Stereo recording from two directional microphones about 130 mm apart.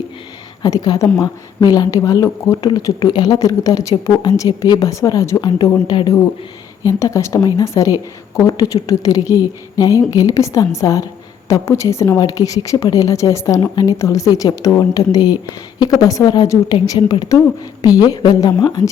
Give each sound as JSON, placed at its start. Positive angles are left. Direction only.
{"t": 0.6, "sound": "a woman's voice", "side_deg": 30}